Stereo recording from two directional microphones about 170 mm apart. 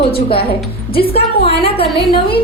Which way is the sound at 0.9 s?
35° left (ahead or behind).